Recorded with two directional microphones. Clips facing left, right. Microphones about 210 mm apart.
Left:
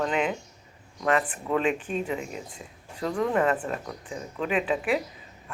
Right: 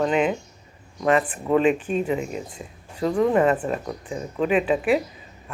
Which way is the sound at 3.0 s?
15° right (ahead or behind).